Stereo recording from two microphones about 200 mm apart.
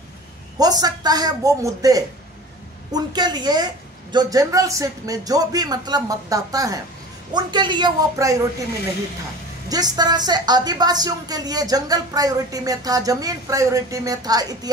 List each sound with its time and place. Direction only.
0.6 s a woman's voice: 20° right (ahead or behind)
9.7 s a woman's voice: 20° right (ahead or behind)